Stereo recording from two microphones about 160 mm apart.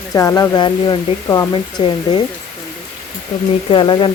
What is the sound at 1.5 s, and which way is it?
Speech, 35° left (ahead or behind).